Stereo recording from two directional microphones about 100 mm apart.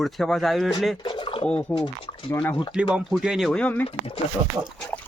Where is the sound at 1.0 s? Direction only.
55° left (ahead or behind).